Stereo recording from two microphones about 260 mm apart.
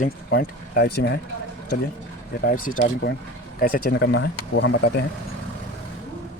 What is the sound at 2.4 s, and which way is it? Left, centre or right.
Speech, left.